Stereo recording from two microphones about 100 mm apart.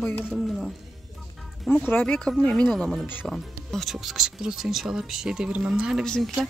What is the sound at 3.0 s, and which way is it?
Speech, 20° left (ahead or behind).